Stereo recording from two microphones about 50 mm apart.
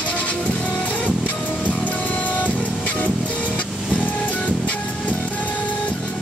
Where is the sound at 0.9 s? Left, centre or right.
Left.